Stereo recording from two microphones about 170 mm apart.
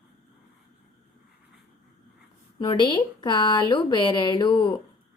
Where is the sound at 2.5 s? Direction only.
25° left (ahead or behind).